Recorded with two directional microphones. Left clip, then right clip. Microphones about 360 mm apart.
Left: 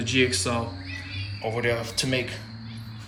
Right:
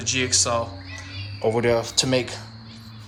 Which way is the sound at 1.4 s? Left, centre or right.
Right.